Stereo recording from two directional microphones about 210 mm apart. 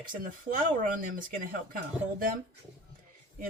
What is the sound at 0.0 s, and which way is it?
Speech, 40° right (ahead or behind).